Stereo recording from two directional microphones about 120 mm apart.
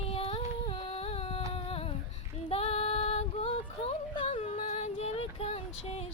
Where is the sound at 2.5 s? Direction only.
60° left (ahead or behind).